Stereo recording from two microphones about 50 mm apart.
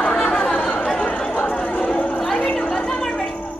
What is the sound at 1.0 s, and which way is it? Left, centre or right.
Chatter, centre.